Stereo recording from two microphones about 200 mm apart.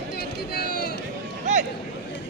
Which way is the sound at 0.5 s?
50° left (ahead or behind).